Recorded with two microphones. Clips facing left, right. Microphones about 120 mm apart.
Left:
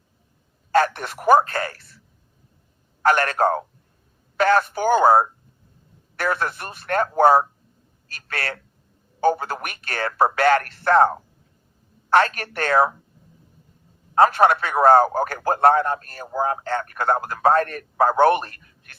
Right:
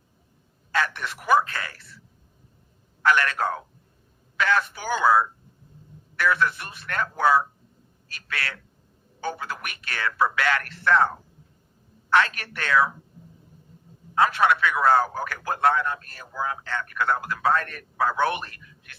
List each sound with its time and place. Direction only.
0.7 s a man's voice: 45° left (ahead or behind)
3.0 s a man's voice: 45° left (ahead or behind)
14.2 s a man's voice: 45° left (ahead or behind)